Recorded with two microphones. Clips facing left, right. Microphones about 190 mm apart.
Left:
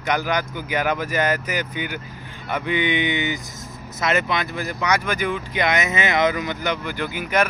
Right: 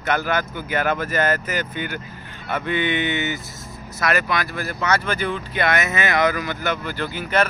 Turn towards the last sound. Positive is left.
turn(degrees=10)  # may be behind; listen again after turning